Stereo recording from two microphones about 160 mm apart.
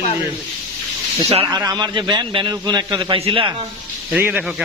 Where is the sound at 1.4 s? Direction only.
20° right (ahead or behind).